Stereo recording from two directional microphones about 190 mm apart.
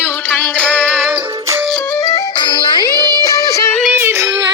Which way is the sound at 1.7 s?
10° left (ahead or behind).